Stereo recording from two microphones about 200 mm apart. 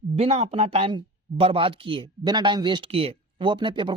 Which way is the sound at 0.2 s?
30° right (ahead or behind).